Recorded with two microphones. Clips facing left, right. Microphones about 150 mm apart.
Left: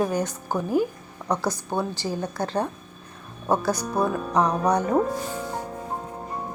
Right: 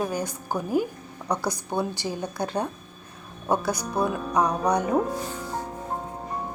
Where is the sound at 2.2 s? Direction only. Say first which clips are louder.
Left 2 dB; 15° right (ahead or behind).